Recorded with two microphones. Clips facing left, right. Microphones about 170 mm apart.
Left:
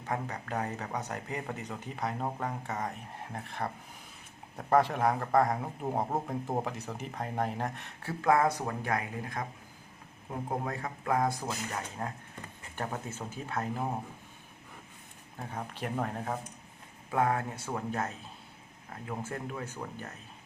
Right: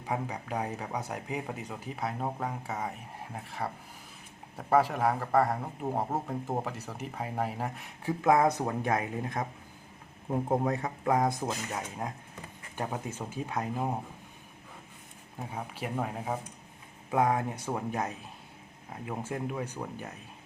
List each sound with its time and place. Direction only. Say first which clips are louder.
0.0 s speech: right 1 dB; 10° right (ahead or behind)
10.6 s speech: right 6 dB; 20° right (ahead or behind)
15.4 s speech: right 1 dB; 10° right (ahead or behind)